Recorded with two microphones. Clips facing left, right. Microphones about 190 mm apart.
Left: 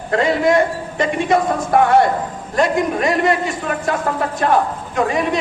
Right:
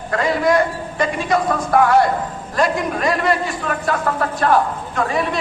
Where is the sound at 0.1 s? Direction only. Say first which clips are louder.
Left 2 dB; 25° left (ahead or behind).